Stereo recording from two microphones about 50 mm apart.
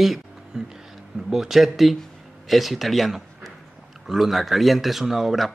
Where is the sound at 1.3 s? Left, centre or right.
Centre.